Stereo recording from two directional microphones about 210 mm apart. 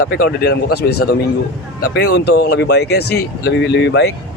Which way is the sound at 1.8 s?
50° left (ahead or behind).